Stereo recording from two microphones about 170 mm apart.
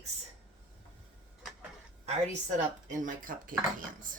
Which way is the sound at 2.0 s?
40° right (ahead or behind).